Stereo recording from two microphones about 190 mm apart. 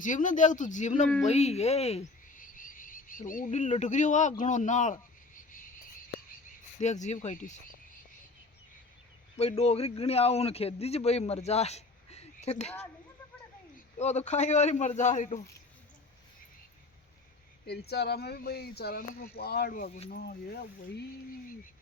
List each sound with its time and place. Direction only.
0.0 s a man's voice: 40° left (ahead or behind)
6.7 s a man's voice: 40° left (ahead or behind)
9.4 s a man's voice: 35° left (ahead or behind)
14.0 s a man's voice: 35° left (ahead or behind)
17.7 s speech: 60° left (ahead or behind)